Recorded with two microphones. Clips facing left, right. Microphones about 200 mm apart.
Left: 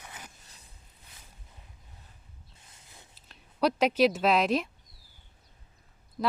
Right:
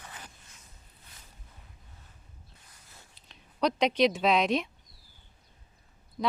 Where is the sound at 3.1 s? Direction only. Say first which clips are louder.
Even; 5° left (ahead or behind).